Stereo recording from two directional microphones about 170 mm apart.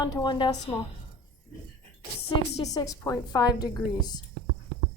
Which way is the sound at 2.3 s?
25° left (ahead or behind).